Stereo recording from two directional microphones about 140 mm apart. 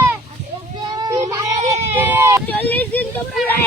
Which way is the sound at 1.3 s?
25° right (ahead or behind).